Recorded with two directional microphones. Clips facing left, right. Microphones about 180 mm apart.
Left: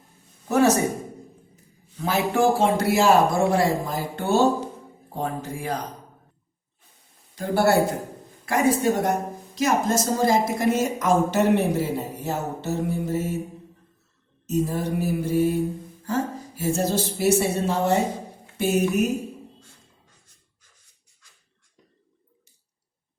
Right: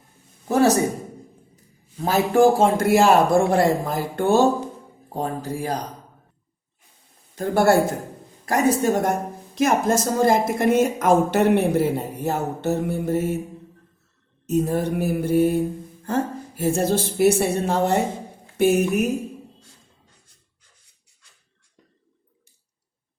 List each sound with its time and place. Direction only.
0.4 s speech: 35° right (ahead or behind)
2.0 s a man's voice: 40° right (ahead or behind)
5.1 s speech: 35° right (ahead or behind)
7.3 s a man's voice: 50° right (ahead or behind)
14.4 s speech: 55° right (ahead or behind)